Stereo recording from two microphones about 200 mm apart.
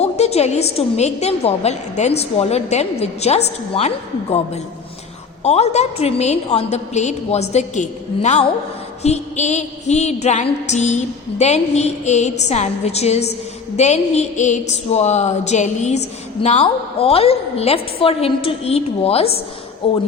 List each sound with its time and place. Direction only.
0.0 s music: 30° left (ahead or behind)
18.0 s a woman's voice: 30° left (ahead or behind)